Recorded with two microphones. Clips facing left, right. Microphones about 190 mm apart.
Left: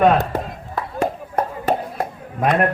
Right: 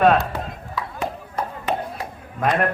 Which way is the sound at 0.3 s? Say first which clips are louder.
Left 4 dB; 50° left (ahead or behind).